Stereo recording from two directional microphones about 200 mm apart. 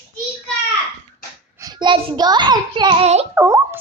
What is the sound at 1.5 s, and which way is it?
A child's voice, 20° right (ahead or behind).